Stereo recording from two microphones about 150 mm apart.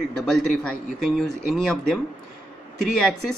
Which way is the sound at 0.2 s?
5° left (ahead or behind).